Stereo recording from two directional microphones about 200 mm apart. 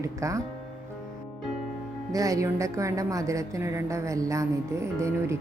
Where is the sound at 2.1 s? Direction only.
15° right (ahead or behind).